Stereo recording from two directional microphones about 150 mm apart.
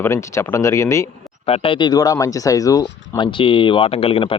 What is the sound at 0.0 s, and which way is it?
Speech, 20° left (ahead or behind).